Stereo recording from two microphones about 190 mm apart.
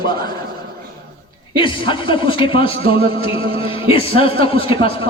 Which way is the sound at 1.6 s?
25° left (ahead or behind).